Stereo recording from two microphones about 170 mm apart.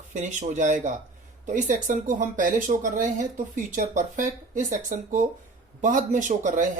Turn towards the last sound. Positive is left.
turn(degrees=-50)  # may be behind; listen again after turning